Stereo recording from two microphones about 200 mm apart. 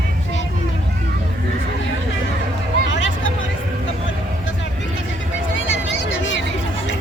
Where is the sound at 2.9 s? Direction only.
70° left (ahead or behind).